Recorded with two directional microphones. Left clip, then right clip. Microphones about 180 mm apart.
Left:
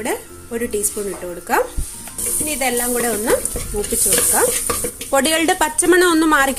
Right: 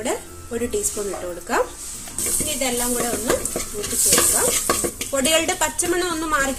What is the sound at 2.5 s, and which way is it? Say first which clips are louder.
Speech: left 5 dB; 45° left (ahead or behind).